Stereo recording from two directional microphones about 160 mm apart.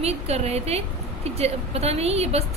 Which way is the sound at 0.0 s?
40° right (ahead or behind).